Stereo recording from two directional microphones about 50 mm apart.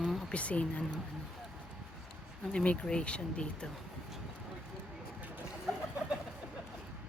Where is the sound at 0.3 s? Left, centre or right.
Left.